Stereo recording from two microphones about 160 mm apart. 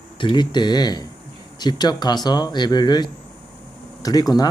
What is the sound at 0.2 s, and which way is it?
Speech, 30° left (ahead or behind).